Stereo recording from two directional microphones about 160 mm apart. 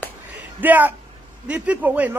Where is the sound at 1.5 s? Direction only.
10° right (ahead or behind).